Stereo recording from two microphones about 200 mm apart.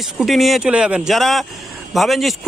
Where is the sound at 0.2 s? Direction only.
Centre (ahead or behind).